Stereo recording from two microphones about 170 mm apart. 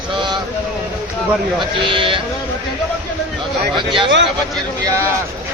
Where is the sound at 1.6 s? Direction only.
30° right (ahead or behind).